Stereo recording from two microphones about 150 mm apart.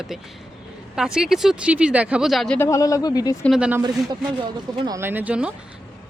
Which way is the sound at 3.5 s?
5° right (ahead or behind).